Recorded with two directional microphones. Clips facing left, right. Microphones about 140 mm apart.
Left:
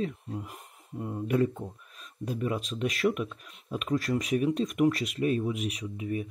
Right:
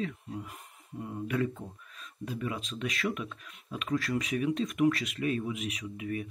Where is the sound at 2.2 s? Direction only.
45° left (ahead or behind).